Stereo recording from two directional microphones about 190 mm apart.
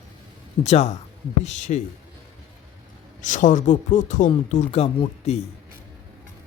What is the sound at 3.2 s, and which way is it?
Speech, 40° left (ahead or behind).